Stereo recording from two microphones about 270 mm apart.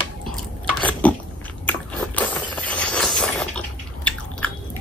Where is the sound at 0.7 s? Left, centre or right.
Centre.